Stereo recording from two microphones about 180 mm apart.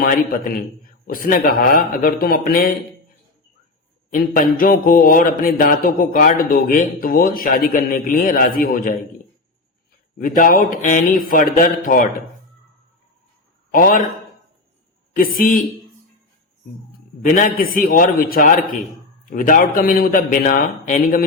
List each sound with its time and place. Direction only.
0.0 s mantra: 55° left (ahead or behind)
4.1 s mantra: 50° left (ahead or behind)
10.2 s mantra: 50° left (ahead or behind)
13.7 s a man's voice: 50° left (ahead or behind)
15.1 s mantra: 50° left (ahead or behind)
17.2 s mantra: 50° left (ahead or behind)